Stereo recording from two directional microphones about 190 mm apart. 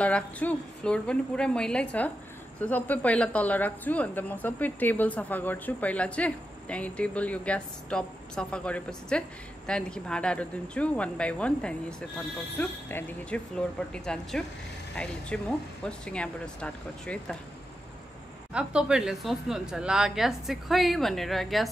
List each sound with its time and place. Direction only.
0.0 s a woman's voice: 5° left (ahead or behind)
18.5 s speech: 5° right (ahead or behind)